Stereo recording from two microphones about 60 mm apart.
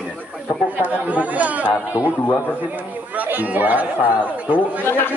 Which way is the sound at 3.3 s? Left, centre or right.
Right.